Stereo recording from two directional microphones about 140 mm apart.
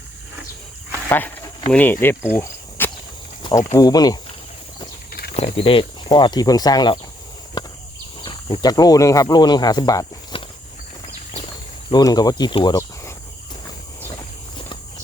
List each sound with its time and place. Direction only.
1.0 s speech: 15° left (ahead or behind)
2.3 s cricket: 15° left (ahead or behind)
3.4 s snake: 25° left (ahead or behind)
3.8 s speech: 25° left (ahead or behind)
5.4 s speech: 45° left (ahead or behind); by 7.0 s 30° left (ahead or behind)
7.6 s a sound: 30° left (ahead or behind)
8.2 s speech: 35° left (ahead or behind)
10.3 s horse: 40° left (ahead or behind)
11.9 s speech: 30° left (ahead or behind)